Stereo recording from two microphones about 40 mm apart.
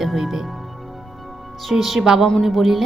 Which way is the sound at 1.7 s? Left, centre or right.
Centre.